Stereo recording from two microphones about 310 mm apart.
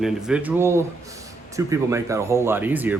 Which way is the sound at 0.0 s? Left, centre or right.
Centre.